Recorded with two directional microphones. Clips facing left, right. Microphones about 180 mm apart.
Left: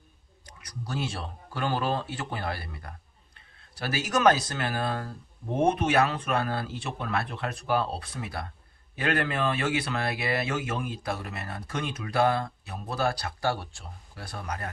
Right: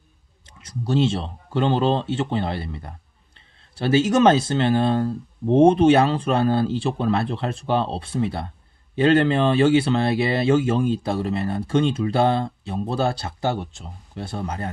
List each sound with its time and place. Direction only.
0.4 s speech: 25° right (ahead or behind)